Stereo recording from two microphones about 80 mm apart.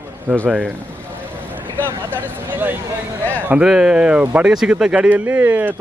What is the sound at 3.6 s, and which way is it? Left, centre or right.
Speech, centre.